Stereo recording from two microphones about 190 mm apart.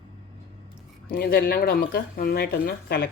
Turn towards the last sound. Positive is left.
turn(degrees=55)  # may be behind; listen again after turning